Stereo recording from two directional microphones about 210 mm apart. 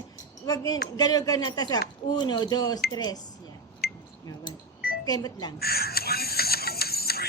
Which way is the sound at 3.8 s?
45° left (ahead or behind).